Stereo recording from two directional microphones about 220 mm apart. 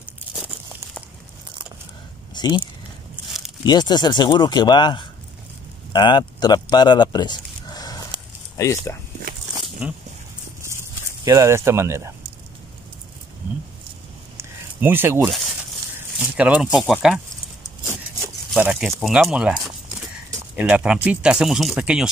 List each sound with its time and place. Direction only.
2.3 s a sound: 20° left (ahead or behind)
3.6 s speech: 20° left (ahead or behind)
9.8 s speech: 5° right (ahead or behind)
11.2 s speech: 15° right (ahead or behind)
14.3 s a sound: 10° right (ahead or behind)
16.2 s speech: 5° right (ahead or behind)
18.5 s speech: 5° right (ahead or behind)